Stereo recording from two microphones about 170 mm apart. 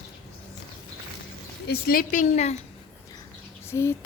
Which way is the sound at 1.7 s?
60° left (ahead or behind).